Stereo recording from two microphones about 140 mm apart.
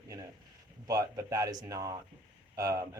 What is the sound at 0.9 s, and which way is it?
Speech, 25° right (ahead or behind).